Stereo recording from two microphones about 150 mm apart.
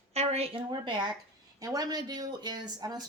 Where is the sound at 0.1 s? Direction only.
45° right (ahead or behind).